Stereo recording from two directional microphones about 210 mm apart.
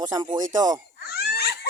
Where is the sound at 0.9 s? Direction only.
50° left (ahead or behind).